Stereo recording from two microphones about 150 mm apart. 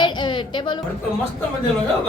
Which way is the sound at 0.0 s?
30° left (ahead or behind).